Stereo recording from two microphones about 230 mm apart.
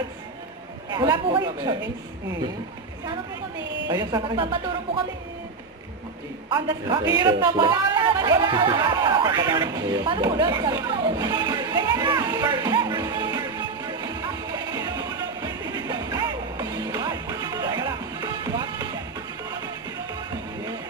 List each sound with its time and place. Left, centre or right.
0.9 s speech: centre
3.8 s speech: centre
6.5 s speech: centre
7.2 s a sound: centre